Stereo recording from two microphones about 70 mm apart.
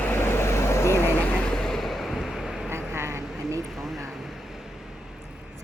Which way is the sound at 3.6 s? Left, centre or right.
Centre.